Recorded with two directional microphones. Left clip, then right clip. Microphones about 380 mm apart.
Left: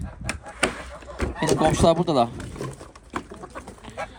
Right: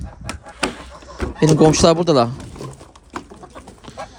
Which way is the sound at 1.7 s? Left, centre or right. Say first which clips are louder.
Right 6 dB; right.